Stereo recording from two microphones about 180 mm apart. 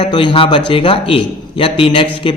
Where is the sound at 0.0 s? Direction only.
25° left (ahead or behind).